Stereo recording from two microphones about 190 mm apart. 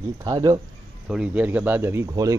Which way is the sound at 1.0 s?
5° right (ahead or behind).